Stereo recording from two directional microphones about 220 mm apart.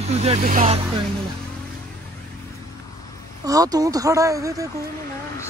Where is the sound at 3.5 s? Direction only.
15° right (ahead or behind).